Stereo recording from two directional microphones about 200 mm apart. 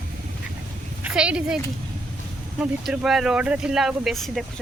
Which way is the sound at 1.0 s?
5° right (ahead or behind).